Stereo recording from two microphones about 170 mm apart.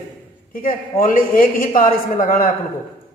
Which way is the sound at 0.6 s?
55° left (ahead or behind).